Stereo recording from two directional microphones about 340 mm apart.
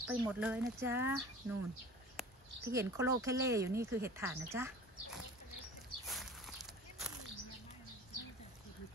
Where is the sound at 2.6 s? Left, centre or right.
Centre.